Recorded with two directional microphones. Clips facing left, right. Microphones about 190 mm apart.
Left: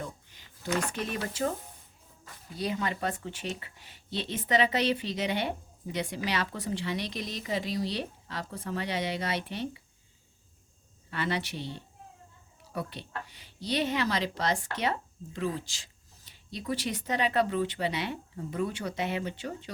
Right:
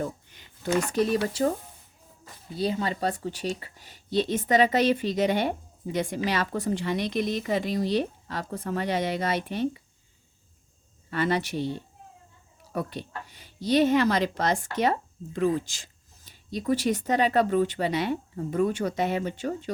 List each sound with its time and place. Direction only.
0.7 s speech: 35° right (ahead or behind)
2.6 s speech: 30° right (ahead or behind); by 9.8 s 45° right (ahead or behind)
11.1 s speech: 45° right (ahead or behind)